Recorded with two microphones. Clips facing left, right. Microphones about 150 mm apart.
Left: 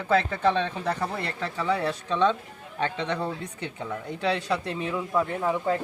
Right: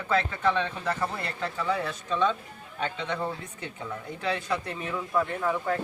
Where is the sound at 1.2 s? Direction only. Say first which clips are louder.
Left 2 dB; 30° left (ahead or behind).